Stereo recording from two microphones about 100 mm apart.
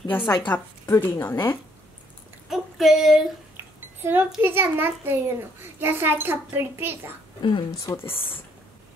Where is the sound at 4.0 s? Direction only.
20° right (ahead or behind).